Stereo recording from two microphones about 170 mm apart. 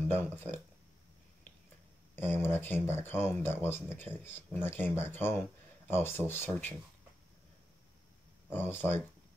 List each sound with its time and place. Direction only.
0.1 s speech: 15° left (ahead or behind)
2.1 s speech: 15° left (ahead or behind)
8.5 s speech: 10° left (ahead or behind)